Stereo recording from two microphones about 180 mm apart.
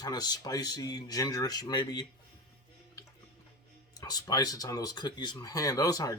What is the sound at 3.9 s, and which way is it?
Speech, 20° left (ahead or behind).